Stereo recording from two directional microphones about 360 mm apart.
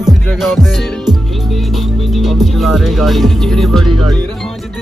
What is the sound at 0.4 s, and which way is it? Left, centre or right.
Speech, centre.